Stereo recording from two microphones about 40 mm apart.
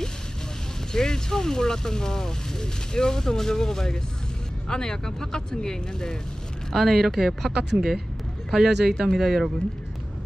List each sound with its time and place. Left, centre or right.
0.9 s speech: centre
6.7 s speech: centre